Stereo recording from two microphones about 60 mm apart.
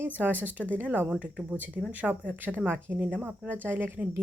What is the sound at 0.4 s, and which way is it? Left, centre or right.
Speech, right.